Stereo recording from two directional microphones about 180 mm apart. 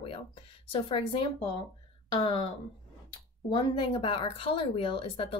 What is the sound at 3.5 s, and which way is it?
Speech, 30° left (ahead or behind).